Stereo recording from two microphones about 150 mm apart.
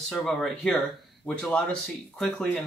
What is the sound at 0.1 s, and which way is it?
Speech, 5° left (ahead or behind).